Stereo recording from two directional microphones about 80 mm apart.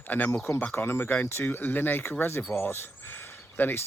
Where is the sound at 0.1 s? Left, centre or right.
Left.